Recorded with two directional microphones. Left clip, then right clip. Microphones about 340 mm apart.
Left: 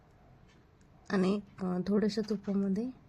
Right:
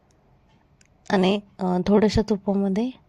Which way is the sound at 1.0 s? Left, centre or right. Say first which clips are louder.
Right 11 dB; right.